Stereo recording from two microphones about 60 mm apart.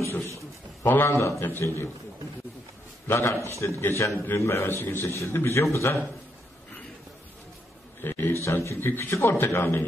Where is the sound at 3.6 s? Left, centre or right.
Left.